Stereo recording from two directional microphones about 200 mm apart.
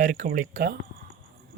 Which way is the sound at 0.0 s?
40° right (ahead or behind).